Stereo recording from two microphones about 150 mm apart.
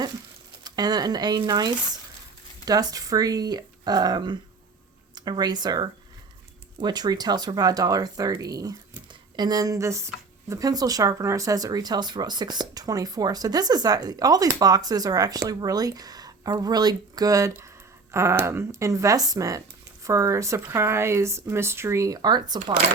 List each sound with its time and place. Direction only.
0.6 s speech: 25° right (ahead or behind)